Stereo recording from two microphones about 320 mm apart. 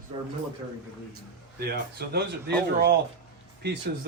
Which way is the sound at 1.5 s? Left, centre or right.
Right.